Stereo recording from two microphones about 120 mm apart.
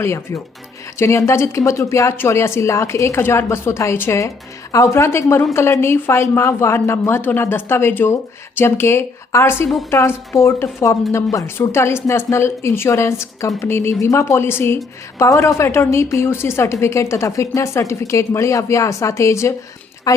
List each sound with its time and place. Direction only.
0.0 s a woman's voice: 20° left (ahead or behind)